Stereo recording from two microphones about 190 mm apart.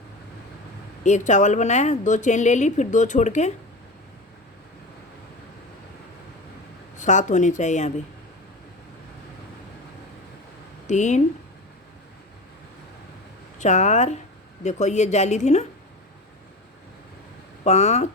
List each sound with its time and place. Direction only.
1.0 s a woman's voice: 40° left (ahead or behind)
7.0 s a woman's voice: 40° left (ahead or behind)
10.8 s a woman's voice: 40° left (ahead or behind)
13.6 s a woman's voice: 40° left (ahead or behind)
17.6 s a woman's voice: 35° left (ahead or behind)